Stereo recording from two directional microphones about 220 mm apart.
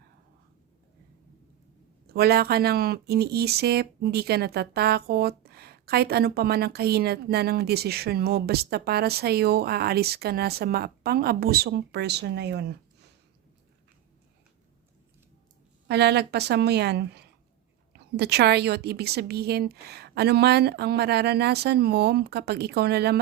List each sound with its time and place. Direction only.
2.1 s speech: 45° right (ahead or behind)
15.9 s speech: 50° right (ahead or behind)